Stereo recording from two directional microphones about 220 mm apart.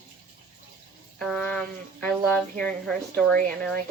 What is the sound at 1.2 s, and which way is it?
Speech, 5° left (ahead or behind).